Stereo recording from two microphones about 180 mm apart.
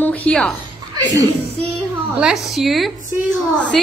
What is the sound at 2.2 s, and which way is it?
A woman's voice, centre (ahead or behind).